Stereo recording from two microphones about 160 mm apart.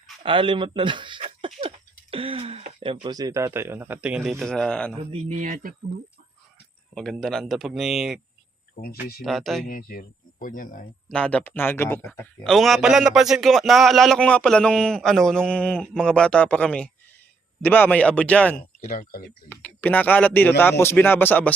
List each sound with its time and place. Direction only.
0.2 s speech: 30° right (ahead or behind)
1.6 s throat clearing: 35° right (ahead or behind)
2.8 s speech: 30° right (ahead or behind); by 4.9 s 5° left (ahead or behind)
4.9 s speech: 40° right (ahead or behind)
6.9 s a man's voice: 5° left (ahead or behind)
8.8 s speech: 70° left (ahead or behind)
9.2 s a man's voice: centre (ahead or behind)
9.6 s speech: 60° left (ahead or behind)
11.1 s speech: 5° left (ahead or behind)
12.5 s a man's voice: centre (ahead or behind)
18.8 s speech: 55° left (ahead or behind)
19.5 s speech: 10° left (ahead or behind)